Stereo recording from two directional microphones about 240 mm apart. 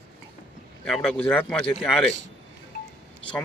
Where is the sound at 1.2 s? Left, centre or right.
Centre.